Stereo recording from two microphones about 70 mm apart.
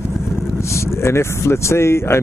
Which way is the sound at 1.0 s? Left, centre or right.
Left.